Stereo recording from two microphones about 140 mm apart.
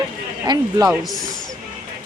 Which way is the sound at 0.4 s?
30° right (ahead or behind).